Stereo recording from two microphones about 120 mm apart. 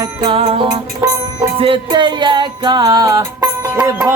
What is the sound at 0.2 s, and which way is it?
Music, 50° right (ahead or behind).